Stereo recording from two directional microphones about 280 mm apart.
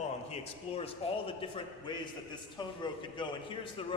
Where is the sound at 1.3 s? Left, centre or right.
Centre.